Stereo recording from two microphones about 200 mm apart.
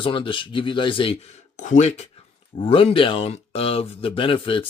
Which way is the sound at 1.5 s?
35° left (ahead or behind).